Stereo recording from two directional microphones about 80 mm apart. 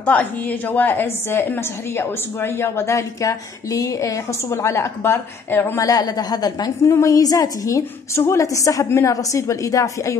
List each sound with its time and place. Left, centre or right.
0.0 s a woman's voice: centre
5.8 s a woman's voice: left
6.9 s a woman's voice: left